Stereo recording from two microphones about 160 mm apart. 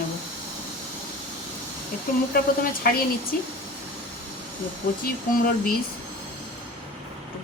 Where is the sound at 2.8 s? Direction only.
65° left (ahead or behind).